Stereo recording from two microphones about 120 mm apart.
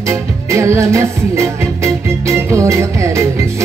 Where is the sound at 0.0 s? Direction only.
25° right (ahead or behind).